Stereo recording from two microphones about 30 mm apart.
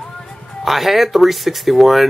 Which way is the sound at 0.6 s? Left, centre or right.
Centre.